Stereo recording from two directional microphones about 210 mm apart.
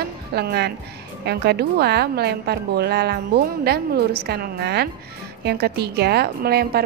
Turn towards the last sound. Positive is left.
turn(degrees=-50)  # may be behind; listen again after turning